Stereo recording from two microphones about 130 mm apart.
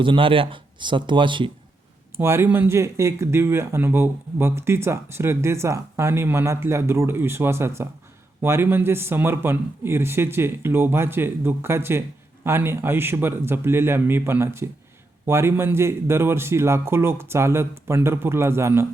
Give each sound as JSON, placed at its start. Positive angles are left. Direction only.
{"t": 0.0, "sound": "speech", "side_deg": -40}
{"t": 2.1, "sound": "speech", "side_deg": -20}